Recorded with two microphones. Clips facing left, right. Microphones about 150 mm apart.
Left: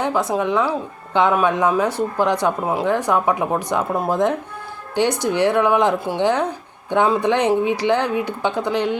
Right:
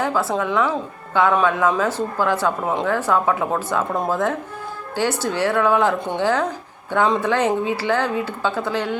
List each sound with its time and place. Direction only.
0.0 s a woman's voice: 20° left (ahead or behind)